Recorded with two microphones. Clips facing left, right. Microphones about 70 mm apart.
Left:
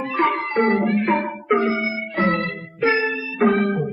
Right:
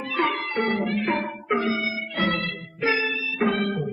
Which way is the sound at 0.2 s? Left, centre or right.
Left.